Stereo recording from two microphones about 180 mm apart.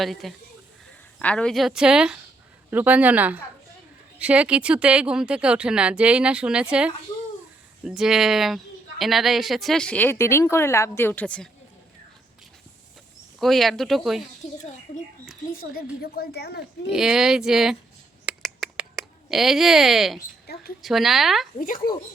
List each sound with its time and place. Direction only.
0.0 s a woman's voice: centre (ahead or behind)
13.4 s a woman's voice: centre (ahead or behind)
15.7 s a woman's voice: 60° left (ahead or behind)
16.9 s a woman's voice: 5° right (ahead or behind)
18.3 s finger snapping: 5° right (ahead or behind)
20.5 s a sound: 60° left (ahead or behind)
20.8 s a woman's voice: centre (ahead or behind)